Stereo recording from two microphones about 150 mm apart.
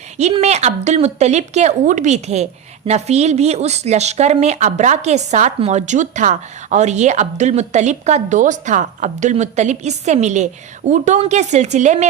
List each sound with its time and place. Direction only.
0.2 s a woman's voice: 45° right (ahead or behind)